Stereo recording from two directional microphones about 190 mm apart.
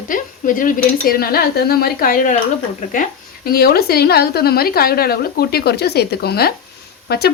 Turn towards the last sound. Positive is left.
turn(degrees=60)  # may be behind; listen again after turning